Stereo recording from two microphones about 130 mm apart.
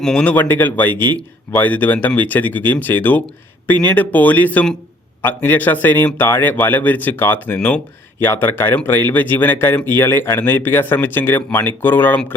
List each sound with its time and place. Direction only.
0.0 s speech: 5° left (ahead or behind)